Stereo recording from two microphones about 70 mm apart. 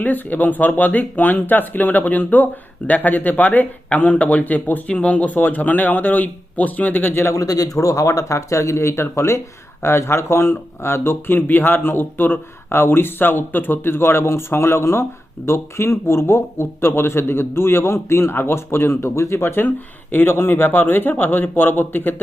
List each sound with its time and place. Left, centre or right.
0.0 s speech: left
7.3 s a man's voice: left